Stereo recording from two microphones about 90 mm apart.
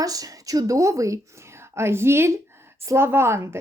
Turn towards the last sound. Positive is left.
turn(degrees=-30)  # may be behind; listen again after turning